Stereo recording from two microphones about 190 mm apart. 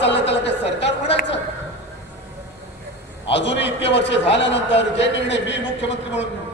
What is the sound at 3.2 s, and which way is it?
A man's voice, 70° left (ahead or behind).